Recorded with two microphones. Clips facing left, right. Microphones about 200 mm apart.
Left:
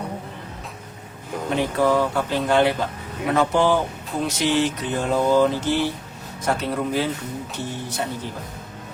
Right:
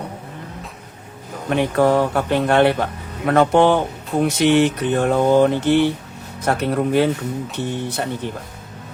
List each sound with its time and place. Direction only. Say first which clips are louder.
1.5 s speech: right 4 dB; 65° right (ahead or behind)